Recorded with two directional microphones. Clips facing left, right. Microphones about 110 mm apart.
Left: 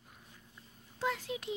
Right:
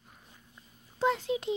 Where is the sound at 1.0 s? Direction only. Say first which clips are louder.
Right 7 dB; 25° right (ahead or behind).